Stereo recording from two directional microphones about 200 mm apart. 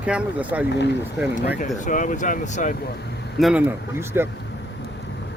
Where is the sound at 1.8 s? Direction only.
40° left (ahead or behind).